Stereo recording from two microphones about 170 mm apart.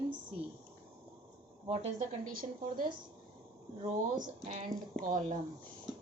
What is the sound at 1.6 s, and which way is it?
Speech, 35° right (ahead or behind).